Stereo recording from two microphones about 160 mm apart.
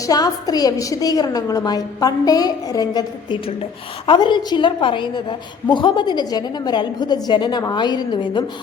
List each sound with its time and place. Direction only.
0.0 s a woman's voice: 25° left (ahead or behind)